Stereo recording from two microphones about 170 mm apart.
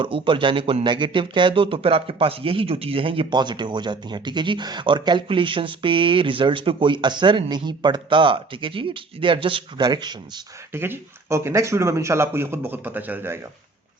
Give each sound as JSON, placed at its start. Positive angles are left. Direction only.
{"t": 0.0, "sound": "speech", "side_deg": -30}
{"t": 10.7, "sound": "speech", "side_deg": -15}